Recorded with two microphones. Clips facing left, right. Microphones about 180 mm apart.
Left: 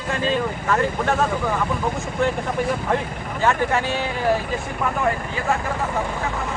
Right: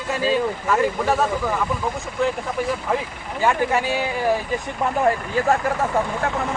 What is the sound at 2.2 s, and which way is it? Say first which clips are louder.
Speech: even; centre (ahead or behind).